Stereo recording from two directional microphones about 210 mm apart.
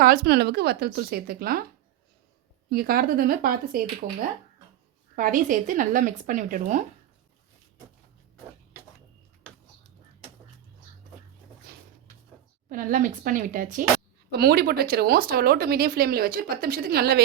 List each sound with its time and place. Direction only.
0.0 s speech: 45° right (ahead or behind)
2.6 s speech: 45° right (ahead or behind)
5.1 s a woman's voice: 40° right (ahead or behind)
11.7 s a sound: 50° right (ahead or behind)
12.6 s a woman's voice: 40° right (ahead or behind)
14.3 s speech: 50° right (ahead or behind)